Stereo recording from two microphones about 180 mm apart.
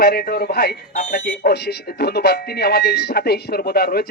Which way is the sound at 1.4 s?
65° left (ahead or behind).